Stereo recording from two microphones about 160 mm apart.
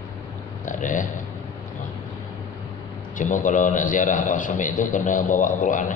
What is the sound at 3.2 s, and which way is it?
A man's voice, 55° left (ahead or behind).